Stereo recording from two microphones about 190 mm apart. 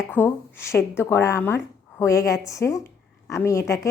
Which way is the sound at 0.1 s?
10° left (ahead or behind).